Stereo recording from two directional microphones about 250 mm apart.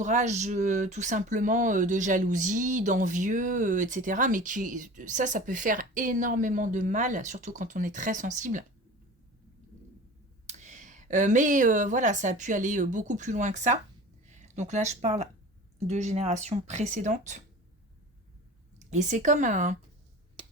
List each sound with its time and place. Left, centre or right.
0.0 s speech: right
10.4 s speech: right
18.9 s speech: right